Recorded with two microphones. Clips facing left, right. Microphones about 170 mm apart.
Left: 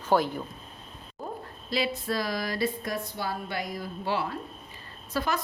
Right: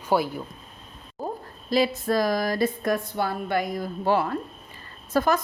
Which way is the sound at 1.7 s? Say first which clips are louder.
Right 7 dB; 45° right (ahead or behind).